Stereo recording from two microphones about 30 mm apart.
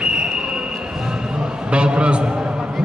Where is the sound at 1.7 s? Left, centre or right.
Right.